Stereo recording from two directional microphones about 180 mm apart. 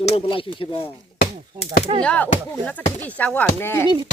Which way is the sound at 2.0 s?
5° left (ahead or behind).